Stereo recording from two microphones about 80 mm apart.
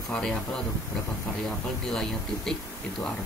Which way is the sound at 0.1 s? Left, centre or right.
Centre.